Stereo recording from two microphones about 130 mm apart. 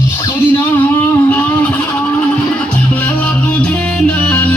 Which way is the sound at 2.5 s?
10° left (ahead or behind).